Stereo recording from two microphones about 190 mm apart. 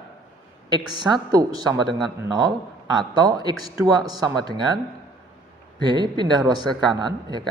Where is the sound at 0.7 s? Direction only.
20° right (ahead or behind).